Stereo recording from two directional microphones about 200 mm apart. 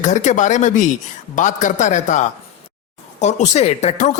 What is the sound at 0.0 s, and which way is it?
Speech, 40° left (ahead or behind).